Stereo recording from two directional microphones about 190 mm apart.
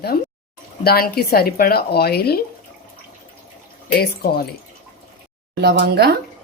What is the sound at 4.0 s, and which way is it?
Speech, 55° left (ahead or behind).